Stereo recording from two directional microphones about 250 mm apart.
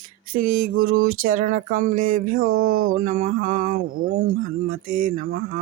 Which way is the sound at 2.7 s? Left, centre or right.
Right.